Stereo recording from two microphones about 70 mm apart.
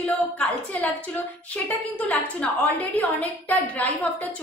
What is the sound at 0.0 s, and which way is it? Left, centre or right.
A woman's voice, left.